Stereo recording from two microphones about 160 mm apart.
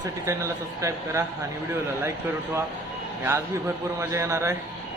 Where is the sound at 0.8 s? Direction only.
20° right (ahead or behind).